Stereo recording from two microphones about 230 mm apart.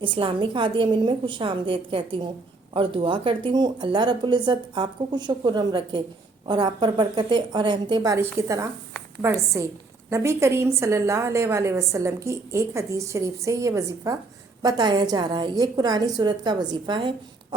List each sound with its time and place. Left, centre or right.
0.0 s a woman's voice: right